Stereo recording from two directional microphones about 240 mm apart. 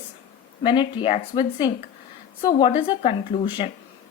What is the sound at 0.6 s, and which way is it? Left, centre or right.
A woman's voice, centre.